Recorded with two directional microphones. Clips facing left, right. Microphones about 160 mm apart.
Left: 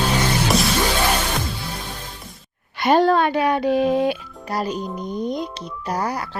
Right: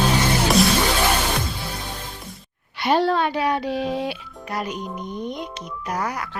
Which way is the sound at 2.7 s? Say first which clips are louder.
Left 4 dB; 50° left (ahead or behind).